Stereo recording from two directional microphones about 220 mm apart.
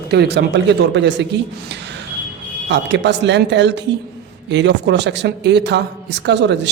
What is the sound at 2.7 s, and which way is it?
Speech, 50° right (ahead or behind).